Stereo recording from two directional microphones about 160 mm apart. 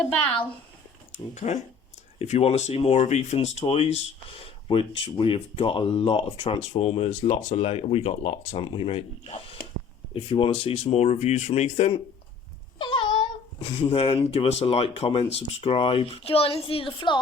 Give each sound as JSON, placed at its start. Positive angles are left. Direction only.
{"t": 1.1, "sound": "speech", "side_deg": 45}
{"t": 12.8, "sound": "speech", "side_deg": 30}